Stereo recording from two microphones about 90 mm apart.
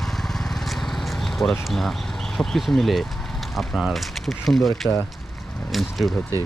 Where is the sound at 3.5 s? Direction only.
Centre (ahead or behind).